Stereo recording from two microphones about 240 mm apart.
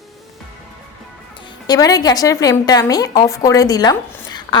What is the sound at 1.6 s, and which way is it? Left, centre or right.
A woman's voice, centre.